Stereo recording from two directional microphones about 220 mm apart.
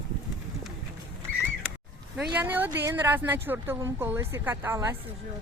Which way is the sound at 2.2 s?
10° right (ahead or behind).